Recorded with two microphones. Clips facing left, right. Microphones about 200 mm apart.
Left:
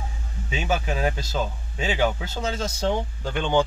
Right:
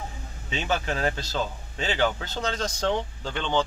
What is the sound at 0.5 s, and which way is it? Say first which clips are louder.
Speech: left 2 dB; 10° left (ahead or behind).